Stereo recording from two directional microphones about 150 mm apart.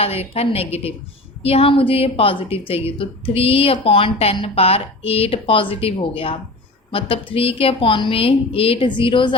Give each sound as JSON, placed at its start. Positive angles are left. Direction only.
{"t": 0.0, "sound": "a woman's voice", "side_deg": 40}